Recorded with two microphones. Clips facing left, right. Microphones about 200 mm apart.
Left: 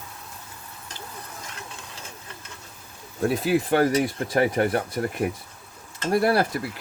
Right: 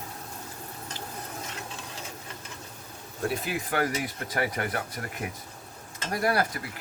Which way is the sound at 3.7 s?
30° left (ahead or behind).